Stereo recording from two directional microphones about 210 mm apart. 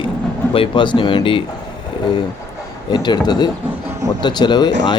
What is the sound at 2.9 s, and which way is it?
Speech, 20° left (ahead or behind).